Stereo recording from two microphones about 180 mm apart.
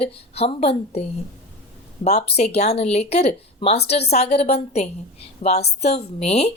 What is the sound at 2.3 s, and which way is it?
Speech, 35° left (ahead or behind).